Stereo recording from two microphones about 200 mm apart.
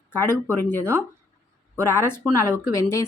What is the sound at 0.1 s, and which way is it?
Speech, 10° left (ahead or behind).